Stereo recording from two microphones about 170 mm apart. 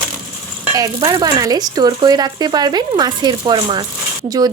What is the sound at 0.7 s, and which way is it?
Speech, 20° right (ahead or behind).